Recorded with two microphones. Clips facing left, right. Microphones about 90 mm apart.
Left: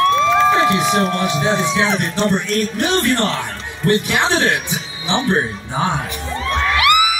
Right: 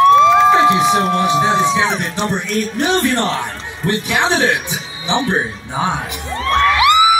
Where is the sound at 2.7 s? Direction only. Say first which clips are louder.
Right 3 dB; 20° right (ahead or behind).